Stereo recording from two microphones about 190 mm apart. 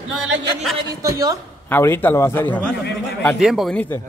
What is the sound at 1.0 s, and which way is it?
Speech, 15° right (ahead or behind).